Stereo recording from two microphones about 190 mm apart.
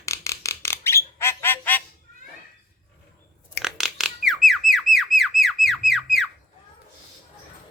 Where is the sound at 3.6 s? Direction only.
Centre (ahead or behind).